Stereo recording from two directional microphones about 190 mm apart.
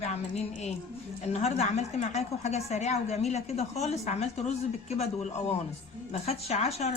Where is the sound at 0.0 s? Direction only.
35° left (ahead or behind).